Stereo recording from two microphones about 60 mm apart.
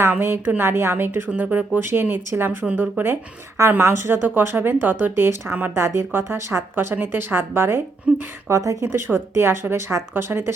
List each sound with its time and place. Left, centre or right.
0.2 s speech: right
6.7 s speech: right
8.1 s a sound: centre
8.4 s a woman's voice: right
9.1 s speech: right